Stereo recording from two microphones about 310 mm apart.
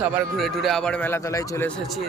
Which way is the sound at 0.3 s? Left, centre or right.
Centre.